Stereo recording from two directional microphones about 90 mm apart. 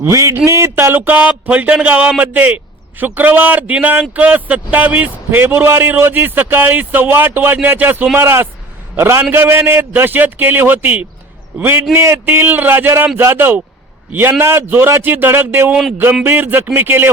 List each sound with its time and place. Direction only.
0.0 s speech: 35° right (ahead or behind)